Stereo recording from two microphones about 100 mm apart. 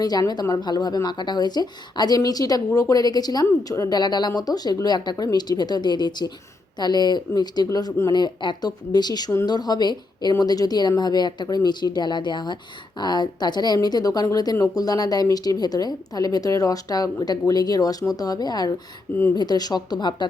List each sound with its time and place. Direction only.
0.0 s speech: 40° left (ahead or behind)